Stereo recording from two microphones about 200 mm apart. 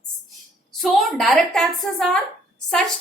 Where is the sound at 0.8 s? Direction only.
Centre (ahead or behind).